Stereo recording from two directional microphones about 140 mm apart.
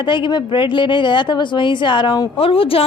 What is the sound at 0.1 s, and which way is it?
A woman's voice, 35° left (ahead or behind).